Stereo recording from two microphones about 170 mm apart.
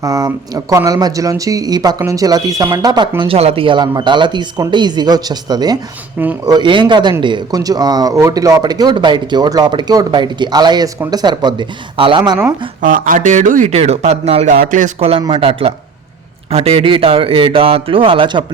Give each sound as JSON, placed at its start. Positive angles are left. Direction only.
{"t": 0.0, "sound": "speech", "side_deg": -20}
{"t": 3.2, "sound": "speech", "side_deg": -35}
{"t": 12.8, "sound": "a man's voice", "side_deg": -50}
{"t": 14.5, "sound": "a man's voice", "side_deg": -55}